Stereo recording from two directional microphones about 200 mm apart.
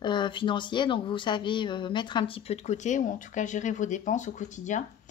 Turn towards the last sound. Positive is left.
turn(degrees=40)  # may be behind; listen again after turning